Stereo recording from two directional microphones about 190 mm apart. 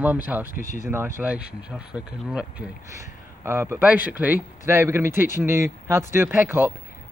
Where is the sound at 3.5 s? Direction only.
10° right (ahead or behind).